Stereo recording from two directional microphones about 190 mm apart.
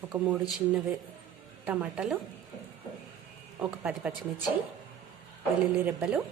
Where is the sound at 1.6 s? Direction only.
5° right (ahead or behind).